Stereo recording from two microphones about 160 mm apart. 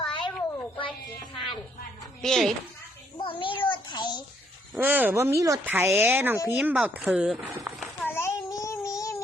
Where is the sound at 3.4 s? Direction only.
30° left (ahead or behind).